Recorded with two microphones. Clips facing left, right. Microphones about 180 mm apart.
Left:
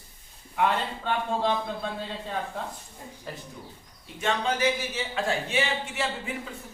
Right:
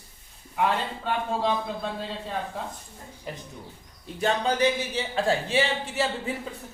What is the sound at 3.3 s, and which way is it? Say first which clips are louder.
Speech: right 2 dB; 15° right (ahead or behind).